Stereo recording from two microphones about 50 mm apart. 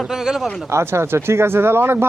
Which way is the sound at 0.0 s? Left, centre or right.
Centre.